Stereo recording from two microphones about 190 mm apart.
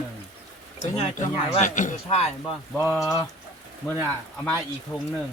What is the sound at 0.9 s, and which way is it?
Speech, 35° left (ahead or behind).